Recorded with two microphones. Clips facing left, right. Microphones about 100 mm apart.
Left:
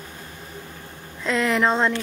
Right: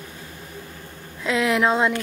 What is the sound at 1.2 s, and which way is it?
Speech, 5° right (ahead or behind).